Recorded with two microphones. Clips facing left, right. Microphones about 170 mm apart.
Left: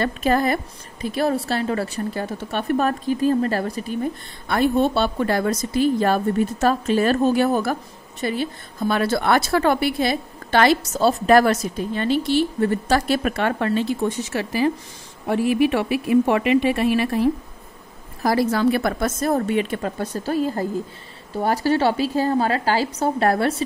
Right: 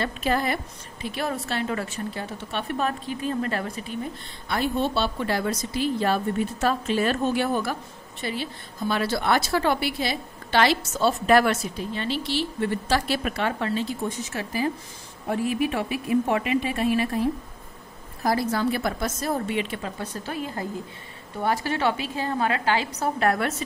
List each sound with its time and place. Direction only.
0.0 s a woman's voice: 45° left (ahead or behind)
4.5 s a woman's voice: 50° left (ahead or behind); by 17.3 s 75° left (ahead or behind)
18.2 s a woman's voice: 90° left; by 23.5 s 35° left (ahead or behind)